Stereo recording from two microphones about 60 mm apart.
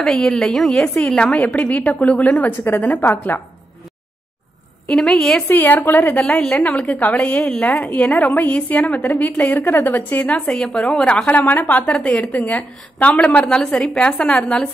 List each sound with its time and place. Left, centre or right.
0.0 s a woman's voice: centre
0.3 s a woman's voice: centre; by 3.3 s left
4.8 s a woman's voice: centre
5.5 s a woman's voice: left
10.5 s a woman's voice: centre; by 13.5 s left
13.8 s a woman's voice: centre